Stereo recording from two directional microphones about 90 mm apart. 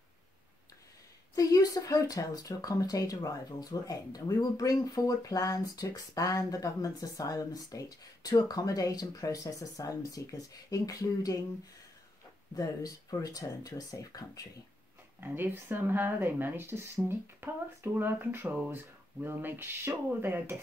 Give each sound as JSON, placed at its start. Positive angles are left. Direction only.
{"t": 1.3, "sound": "speech", "side_deg": 45}
{"t": 12.5, "sound": "speech", "side_deg": 40}
{"t": 15.1, "sound": "speech", "side_deg": -25}